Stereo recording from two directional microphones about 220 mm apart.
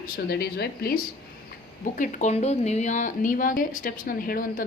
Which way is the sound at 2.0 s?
35° left (ahead or behind).